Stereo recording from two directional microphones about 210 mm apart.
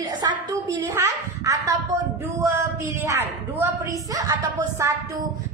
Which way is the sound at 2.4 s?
15° right (ahead or behind).